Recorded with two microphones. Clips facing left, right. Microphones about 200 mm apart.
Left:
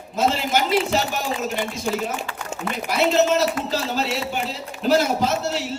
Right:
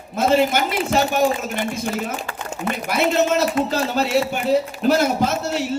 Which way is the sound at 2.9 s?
55° right (ahead or behind).